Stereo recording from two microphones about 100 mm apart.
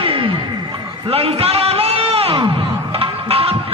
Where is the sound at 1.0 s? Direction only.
75° right (ahead or behind).